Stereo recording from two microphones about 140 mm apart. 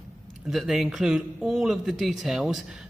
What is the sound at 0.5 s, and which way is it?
Speech, centre (ahead or behind).